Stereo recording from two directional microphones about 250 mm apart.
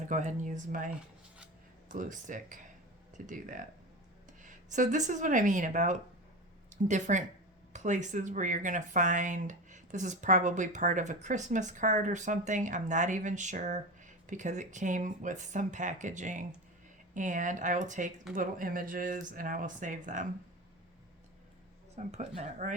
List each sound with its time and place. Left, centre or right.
0.1 s speech: right
1.9 s speech: right
21.9 s speech: right